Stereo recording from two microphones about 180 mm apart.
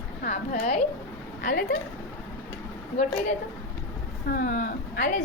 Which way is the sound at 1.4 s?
50° left (ahead or behind).